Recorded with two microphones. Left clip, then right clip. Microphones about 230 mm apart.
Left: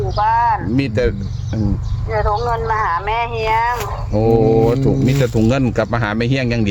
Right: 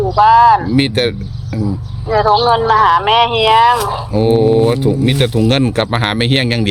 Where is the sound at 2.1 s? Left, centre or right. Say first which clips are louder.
Right 7 dB; right.